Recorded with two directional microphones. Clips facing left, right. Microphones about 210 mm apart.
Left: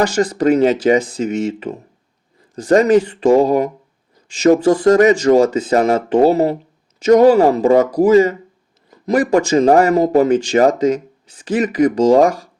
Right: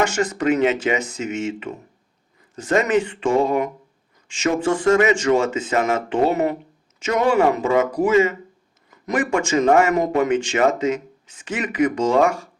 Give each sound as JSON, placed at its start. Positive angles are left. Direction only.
{"t": 0.0, "sound": "speech", "side_deg": 35}